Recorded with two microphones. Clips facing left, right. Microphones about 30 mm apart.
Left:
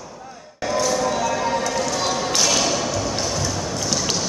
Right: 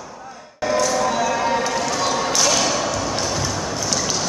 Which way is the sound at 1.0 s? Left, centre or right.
Centre.